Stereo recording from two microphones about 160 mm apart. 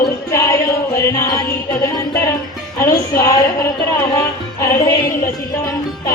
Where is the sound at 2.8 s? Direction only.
15° left (ahead or behind).